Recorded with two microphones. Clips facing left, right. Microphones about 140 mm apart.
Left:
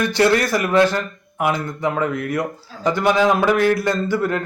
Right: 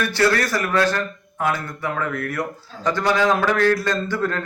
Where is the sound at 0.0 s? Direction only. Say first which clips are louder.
Left 3 dB; 15° left (ahead or behind).